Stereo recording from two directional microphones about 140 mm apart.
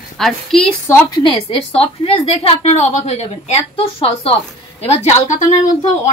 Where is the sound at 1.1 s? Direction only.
35° left (ahead or behind).